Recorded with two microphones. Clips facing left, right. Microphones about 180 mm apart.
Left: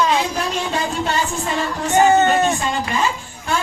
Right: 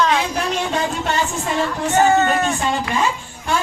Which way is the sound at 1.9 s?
20° left (ahead or behind).